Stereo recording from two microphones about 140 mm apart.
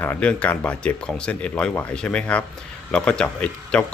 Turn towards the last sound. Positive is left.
turn(degrees=10)  # may be behind; listen again after turning